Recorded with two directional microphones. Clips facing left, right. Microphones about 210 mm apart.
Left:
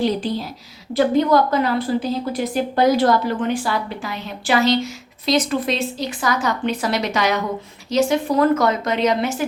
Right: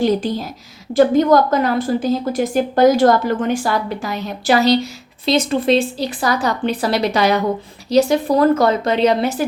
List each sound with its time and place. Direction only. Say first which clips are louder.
0.0 s a woman's voice: right 3 dB; 45° right (ahead or behind)